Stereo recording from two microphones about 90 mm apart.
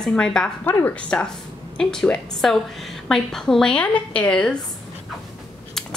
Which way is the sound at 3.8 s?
15° left (ahead or behind).